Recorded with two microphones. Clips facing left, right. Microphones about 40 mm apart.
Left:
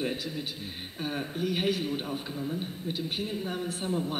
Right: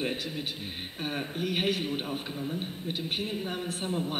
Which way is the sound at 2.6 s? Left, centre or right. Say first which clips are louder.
Left 1 dB; right.